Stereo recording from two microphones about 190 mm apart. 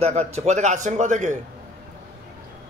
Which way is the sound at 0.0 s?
35° right (ahead or behind).